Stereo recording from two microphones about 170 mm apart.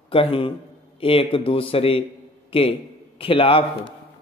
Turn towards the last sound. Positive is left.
turn(degrees=35)  # may be behind; listen again after turning